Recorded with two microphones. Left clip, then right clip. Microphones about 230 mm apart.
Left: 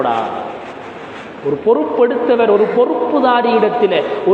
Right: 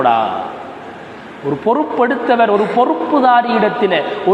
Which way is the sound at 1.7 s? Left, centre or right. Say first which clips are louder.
Left 2 dB; right.